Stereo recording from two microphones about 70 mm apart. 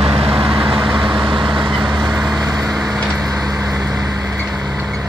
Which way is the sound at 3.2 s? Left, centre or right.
Right.